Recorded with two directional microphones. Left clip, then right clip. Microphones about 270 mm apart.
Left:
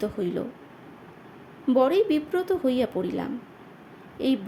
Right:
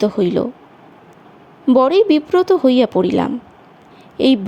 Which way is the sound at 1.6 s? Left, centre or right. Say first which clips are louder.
Right 9 dB; right.